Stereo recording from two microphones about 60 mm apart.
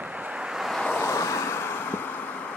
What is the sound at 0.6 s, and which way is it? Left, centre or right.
Vehicle, centre.